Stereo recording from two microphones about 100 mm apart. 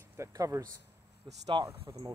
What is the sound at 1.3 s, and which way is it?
Speech, 55° right (ahead or behind).